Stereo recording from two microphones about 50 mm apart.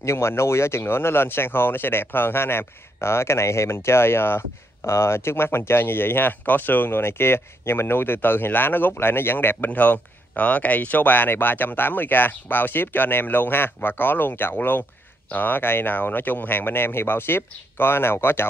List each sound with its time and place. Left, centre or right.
0.0 s speech: left
9.7 s speech: left